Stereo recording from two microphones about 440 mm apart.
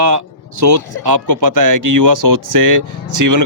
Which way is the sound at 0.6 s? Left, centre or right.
Right.